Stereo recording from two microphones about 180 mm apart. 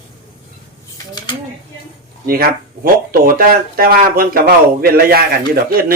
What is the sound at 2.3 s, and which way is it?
Speech, 55° right (ahead or behind).